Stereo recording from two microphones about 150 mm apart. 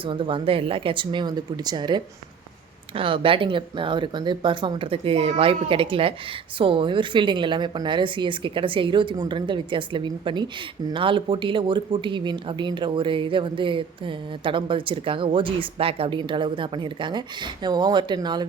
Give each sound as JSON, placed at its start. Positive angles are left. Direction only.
{"t": 0.0, "sound": "a woman's voice", "side_deg": -35}